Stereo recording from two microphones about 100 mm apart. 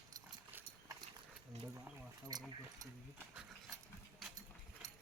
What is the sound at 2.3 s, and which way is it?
Keys jangling, 40° right (ahead or behind).